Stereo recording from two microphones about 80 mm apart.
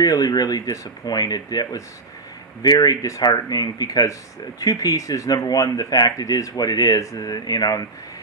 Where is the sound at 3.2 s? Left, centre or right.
Left.